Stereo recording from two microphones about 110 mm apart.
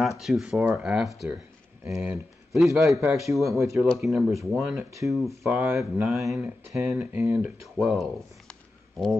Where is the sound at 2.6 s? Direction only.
Centre (ahead or behind).